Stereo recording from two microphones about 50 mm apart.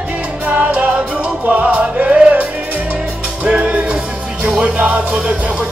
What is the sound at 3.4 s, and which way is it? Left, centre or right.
Music, right.